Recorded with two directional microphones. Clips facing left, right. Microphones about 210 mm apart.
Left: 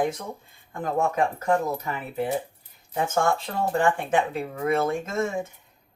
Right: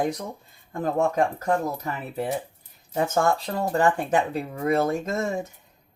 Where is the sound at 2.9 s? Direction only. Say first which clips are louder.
Right 1 dB; 40° right (ahead or behind).